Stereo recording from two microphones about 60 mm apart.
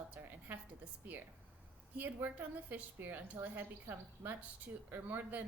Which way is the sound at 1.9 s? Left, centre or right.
Right.